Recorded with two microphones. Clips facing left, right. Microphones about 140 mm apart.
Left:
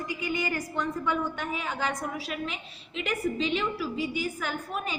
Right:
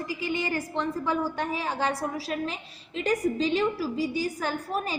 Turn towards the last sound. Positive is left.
turn(degrees=-35)  # may be behind; listen again after turning